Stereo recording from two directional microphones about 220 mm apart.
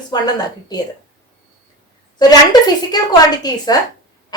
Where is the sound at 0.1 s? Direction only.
20° left (ahead or behind).